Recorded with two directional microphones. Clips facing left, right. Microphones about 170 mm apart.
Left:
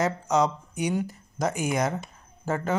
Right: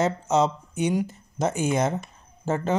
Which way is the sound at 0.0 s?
25° right (ahead or behind).